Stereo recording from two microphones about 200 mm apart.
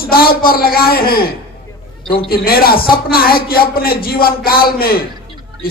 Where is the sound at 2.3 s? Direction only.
50° left (ahead or behind).